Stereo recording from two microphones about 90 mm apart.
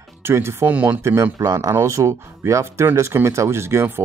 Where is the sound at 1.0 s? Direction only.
35° right (ahead or behind).